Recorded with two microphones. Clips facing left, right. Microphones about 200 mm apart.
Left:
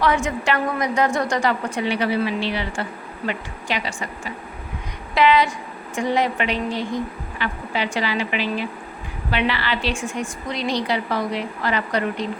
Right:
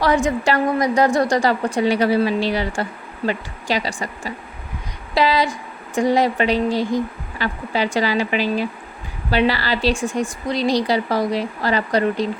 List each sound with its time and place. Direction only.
0.0 s a woman's voice: 35° right (ahead or behind)